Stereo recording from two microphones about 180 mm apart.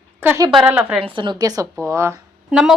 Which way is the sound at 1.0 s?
25° right (ahead or behind).